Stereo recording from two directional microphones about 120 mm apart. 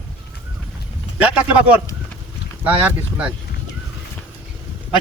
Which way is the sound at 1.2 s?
10° right (ahead or behind).